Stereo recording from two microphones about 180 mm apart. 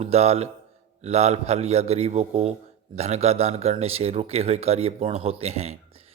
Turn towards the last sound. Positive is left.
turn(degrees=-35)  # may be behind; listen again after turning